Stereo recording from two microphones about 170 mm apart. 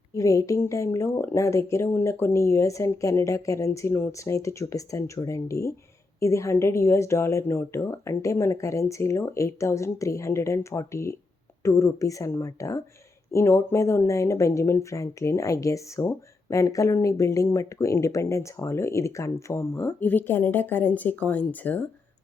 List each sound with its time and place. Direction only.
0.1 s speech: 20° left (ahead or behind)